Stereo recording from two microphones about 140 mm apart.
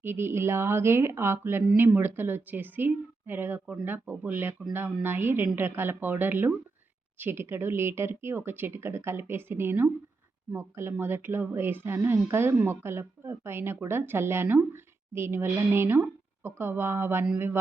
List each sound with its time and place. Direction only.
0.0 s a woman's voice: 15° right (ahead or behind)